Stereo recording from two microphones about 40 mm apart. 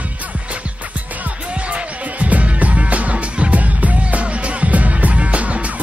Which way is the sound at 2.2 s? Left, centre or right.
Right.